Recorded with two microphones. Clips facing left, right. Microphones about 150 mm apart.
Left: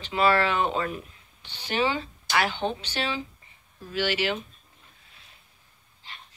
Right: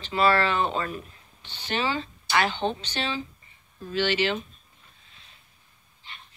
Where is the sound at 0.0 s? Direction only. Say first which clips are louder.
Even; 15° left (ahead or behind).